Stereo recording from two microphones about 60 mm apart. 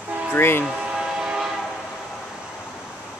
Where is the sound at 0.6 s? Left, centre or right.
Centre.